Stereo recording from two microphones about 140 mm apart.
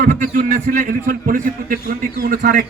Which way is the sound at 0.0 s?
65° right (ahead or behind).